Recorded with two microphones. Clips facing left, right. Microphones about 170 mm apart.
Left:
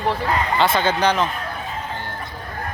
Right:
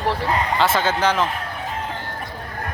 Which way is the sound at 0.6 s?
5° right (ahead or behind).